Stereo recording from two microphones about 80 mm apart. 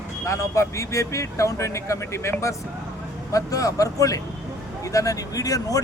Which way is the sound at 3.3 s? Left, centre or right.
Left.